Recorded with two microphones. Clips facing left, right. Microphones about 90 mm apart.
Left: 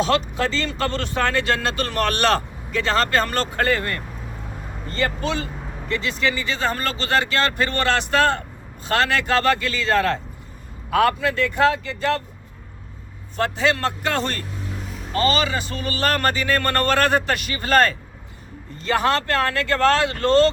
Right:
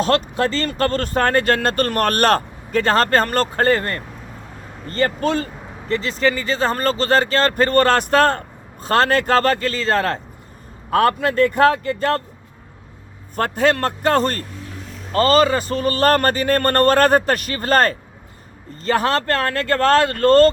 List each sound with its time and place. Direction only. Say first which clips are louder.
0.0 s speech: right 2 dB; 45° right (ahead or behind)
13.3 s speech: right 3 dB; 50° right (ahead or behind)